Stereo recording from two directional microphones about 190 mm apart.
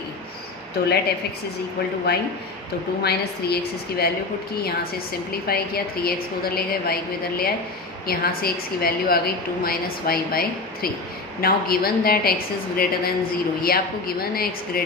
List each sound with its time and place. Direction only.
2.1 s a woman's voice: 60° left (ahead or behind)
5.3 s a woman's voice: 55° left (ahead or behind)